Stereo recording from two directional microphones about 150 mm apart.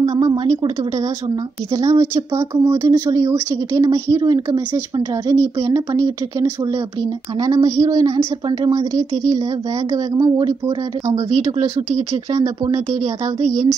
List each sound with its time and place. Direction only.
0.2 s a woman's voice: 25° right (ahead or behind)
1.7 s a woman's voice: 20° right (ahead or behind)
7.3 s a woman's voice: 25° right (ahead or behind)
11.2 s speech: 45° right (ahead or behind)
12.1 s a woman's voice: 20° right (ahead or behind)